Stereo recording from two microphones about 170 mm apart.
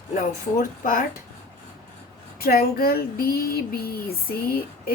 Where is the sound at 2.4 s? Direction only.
60° left (ahead or behind).